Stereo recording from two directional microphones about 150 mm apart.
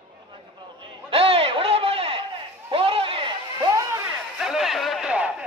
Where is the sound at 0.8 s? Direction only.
40° right (ahead or behind).